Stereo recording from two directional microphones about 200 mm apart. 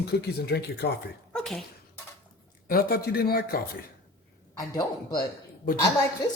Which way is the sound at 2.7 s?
45° left (ahead or behind).